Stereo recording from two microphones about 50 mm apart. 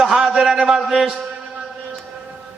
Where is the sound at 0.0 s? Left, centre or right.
Centre.